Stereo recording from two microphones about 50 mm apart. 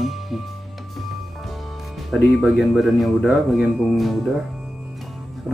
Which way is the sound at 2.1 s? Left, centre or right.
Centre.